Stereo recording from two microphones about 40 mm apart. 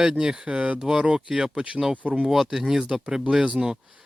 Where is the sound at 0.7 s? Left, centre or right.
Centre.